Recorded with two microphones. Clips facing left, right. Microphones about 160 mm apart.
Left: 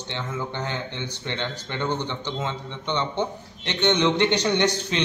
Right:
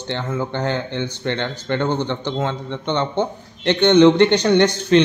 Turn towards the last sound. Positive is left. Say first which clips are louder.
# right 8 dB
turn(degrees=-55)  # may be behind; listen again after turning